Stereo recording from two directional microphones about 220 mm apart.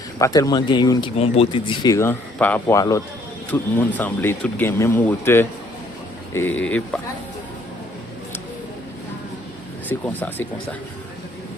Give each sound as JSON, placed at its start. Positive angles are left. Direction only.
{"t": 0.2, "sound": "speech", "side_deg": 15}
{"t": 10.1, "sound": "speech", "side_deg": 10}